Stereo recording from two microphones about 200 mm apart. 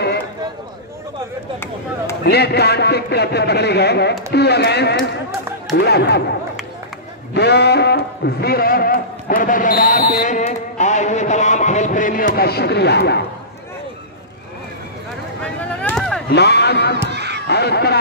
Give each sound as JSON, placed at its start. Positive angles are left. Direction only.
{"t": 2.2, "sound": "a man's voice", "side_deg": 55}
{"t": 7.3, "sound": "a man's voice", "side_deg": 55}
{"t": 15.4, "sound": "a sound", "side_deg": 5}
{"t": 16.3, "sound": "a man's voice", "side_deg": 55}
{"t": 17.1, "sound": "a sound", "side_deg": -55}
{"t": 17.5, "sound": "a man's voice", "side_deg": 55}